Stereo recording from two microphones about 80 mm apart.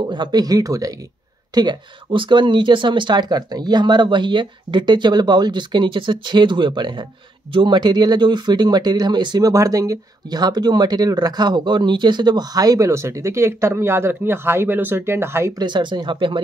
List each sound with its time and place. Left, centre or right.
0.0 s speech: right
1.5 s speech: right
7.5 s speech: right
9.5 s speech: right
10.4 s speech: right
15.6 s speech: right